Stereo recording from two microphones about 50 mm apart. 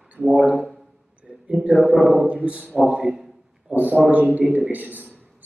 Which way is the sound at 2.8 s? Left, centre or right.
Centre.